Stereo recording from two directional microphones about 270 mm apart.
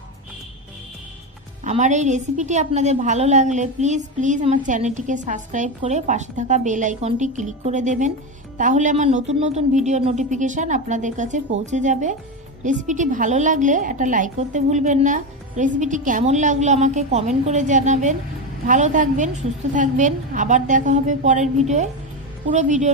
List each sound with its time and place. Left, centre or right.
1.6 s a woman's voice: right